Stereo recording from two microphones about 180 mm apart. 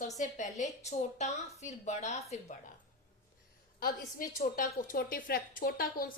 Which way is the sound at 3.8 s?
55° left (ahead or behind).